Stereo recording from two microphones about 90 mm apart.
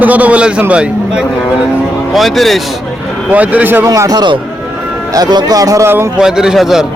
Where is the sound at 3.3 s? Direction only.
15° right (ahead or behind).